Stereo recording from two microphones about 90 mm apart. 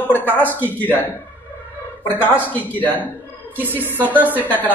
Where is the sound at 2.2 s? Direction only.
20° left (ahead or behind).